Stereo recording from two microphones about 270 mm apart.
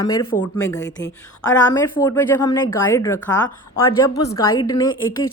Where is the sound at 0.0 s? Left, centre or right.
Centre.